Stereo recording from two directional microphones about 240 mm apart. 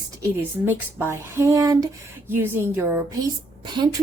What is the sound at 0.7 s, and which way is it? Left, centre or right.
A woman's voice, centre.